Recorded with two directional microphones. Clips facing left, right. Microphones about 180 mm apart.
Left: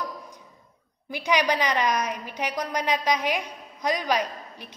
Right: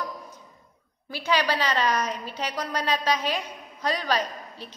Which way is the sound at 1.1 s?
15° left (ahead or behind).